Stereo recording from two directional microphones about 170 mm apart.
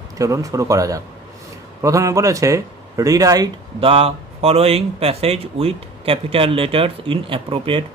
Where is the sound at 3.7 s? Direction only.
35° right (ahead or behind).